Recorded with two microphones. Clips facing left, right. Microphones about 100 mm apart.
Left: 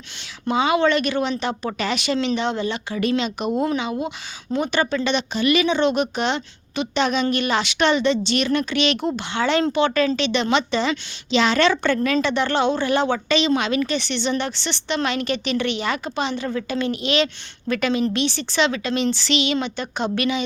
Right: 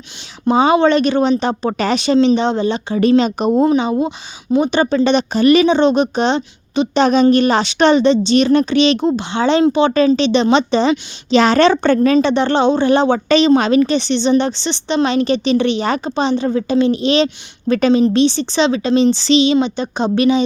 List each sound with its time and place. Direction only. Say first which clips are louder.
0.4 s a woman's voice: right 7 dB; 35° right (ahead or behind)
11.3 s a woman's voice: right 7 dB; 40° right (ahead or behind); by 20.4 s 25° right (ahead or behind)